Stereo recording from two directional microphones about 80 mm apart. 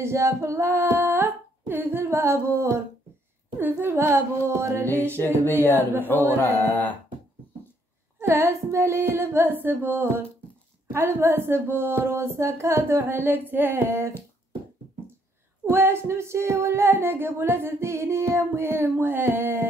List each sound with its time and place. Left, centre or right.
0.0 s female singing: right
3.5 s singing: right
5.1 s music: left
8.2 s singing: right
15.7 s singing: right